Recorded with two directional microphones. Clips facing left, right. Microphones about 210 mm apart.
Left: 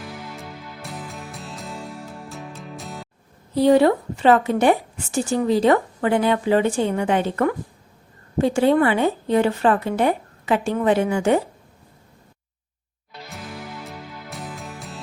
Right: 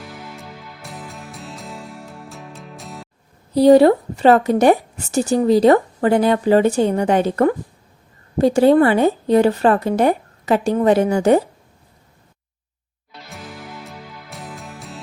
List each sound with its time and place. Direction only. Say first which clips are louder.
0.0 s music: even; centre (ahead or behind)
3.5 s a woman's voice: right 5 dB; 35° right (ahead or behind)
13.3 s music: even; centre (ahead or behind)